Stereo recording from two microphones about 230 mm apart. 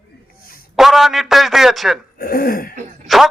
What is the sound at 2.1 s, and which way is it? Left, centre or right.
Speech, left.